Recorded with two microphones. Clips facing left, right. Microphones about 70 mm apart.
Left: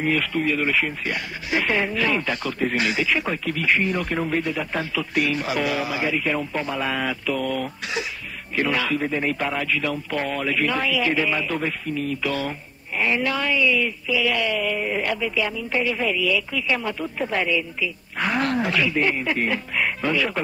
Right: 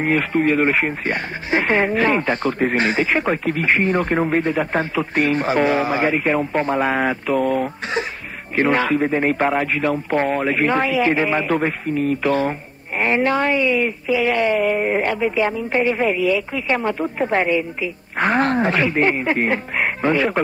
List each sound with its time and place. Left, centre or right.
0.0 s speech: right